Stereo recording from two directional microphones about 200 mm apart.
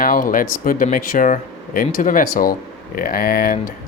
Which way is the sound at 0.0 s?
45° left (ahead or behind).